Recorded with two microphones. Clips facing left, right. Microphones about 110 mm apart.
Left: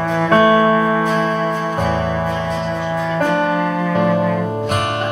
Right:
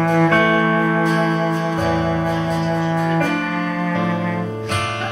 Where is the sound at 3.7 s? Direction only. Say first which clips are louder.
Left 3 dB; 30° left (ahead or behind).